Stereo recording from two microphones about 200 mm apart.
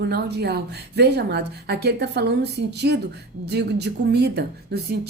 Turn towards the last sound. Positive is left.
turn(degrees=-55)  # may be behind; listen again after turning